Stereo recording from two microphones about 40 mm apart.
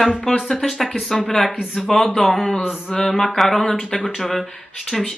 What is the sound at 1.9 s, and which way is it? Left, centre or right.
Speech, centre.